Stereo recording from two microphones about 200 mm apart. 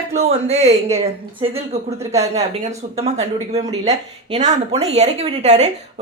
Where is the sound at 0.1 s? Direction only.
30° right (ahead or behind).